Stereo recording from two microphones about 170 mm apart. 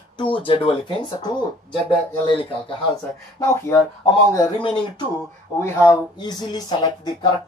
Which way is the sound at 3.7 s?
15° left (ahead or behind).